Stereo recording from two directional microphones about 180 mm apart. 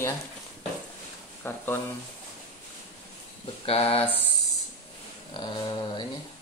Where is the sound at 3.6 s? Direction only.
35° left (ahead or behind).